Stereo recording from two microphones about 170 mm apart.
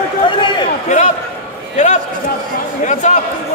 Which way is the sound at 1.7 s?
45° left (ahead or behind).